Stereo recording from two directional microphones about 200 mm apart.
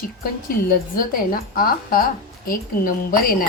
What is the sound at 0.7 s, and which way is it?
A woman's voice, 45° left (ahead or behind).